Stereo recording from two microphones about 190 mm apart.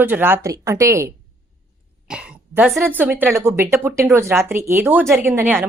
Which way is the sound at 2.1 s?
5° right (ahead or behind).